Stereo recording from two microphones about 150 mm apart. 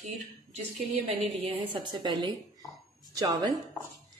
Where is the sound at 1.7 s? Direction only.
35° right (ahead or behind).